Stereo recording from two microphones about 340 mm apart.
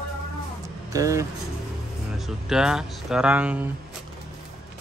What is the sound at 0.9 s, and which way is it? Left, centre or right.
Speech, centre.